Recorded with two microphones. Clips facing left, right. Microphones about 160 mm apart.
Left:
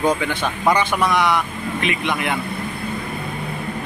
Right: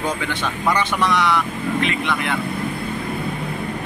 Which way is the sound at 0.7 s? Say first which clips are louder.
Left 1 dB; 10° left (ahead or behind).